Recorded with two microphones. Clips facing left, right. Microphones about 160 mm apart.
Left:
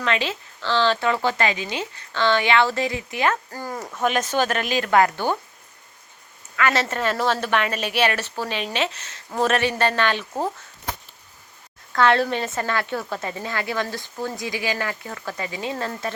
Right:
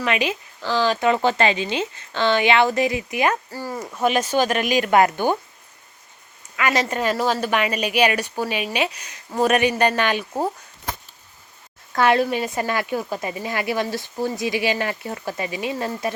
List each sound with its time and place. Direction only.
0.0 s a woman's voice: 15° right (ahead or behind)
6.6 s a woman's voice: 10° right (ahead or behind)
11.9 s a woman's voice: 10° right (ahead or behind)